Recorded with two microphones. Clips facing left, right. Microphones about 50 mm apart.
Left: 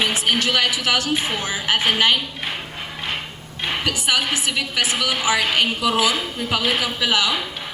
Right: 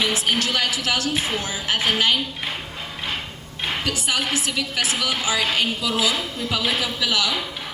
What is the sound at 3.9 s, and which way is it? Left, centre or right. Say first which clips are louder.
A woman's voice: left 2 dB; left.